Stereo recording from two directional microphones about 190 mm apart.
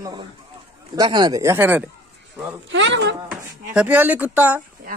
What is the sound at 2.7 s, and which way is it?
Speech, 70° right (ahead or behind).